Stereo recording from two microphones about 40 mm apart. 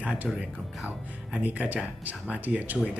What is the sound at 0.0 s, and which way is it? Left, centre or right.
Speech, right.